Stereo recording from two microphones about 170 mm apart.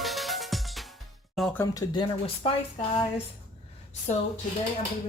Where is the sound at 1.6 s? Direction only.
20° left (ahead or behind).